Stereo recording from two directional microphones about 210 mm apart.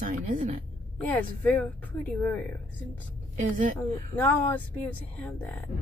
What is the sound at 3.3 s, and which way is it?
Speech, 40° right (ahead or behind).